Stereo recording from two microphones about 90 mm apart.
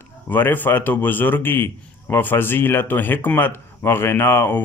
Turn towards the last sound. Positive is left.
turn(degrees=25)  # may be behind; listen again after turning